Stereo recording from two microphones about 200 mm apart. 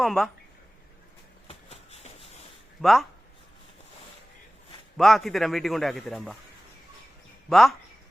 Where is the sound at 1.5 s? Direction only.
30° left (ahead or behind).